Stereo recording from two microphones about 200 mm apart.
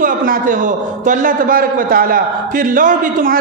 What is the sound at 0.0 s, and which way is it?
A man's voice, 40° right (ahead or behind).